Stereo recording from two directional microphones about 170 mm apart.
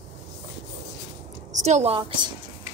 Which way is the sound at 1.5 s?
45° right (ahead or behind).